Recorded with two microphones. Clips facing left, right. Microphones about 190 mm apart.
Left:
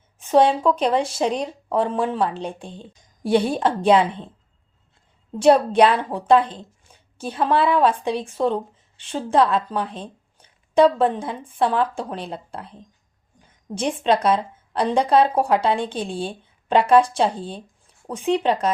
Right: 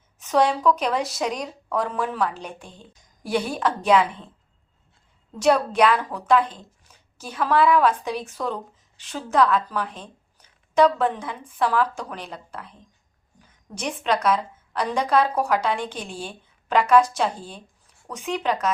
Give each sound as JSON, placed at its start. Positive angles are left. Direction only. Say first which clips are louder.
{"t": 0.2, "sound": "a woman's voice", "louder": "left 4 dB", "side_deg": 30}
{"t": 5.4, "sound": "a woman's voice", "louder": "left 4 dB", "side_deg": 30}